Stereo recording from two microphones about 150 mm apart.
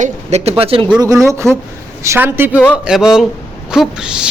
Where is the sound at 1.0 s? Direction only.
20° right (ahead or behind).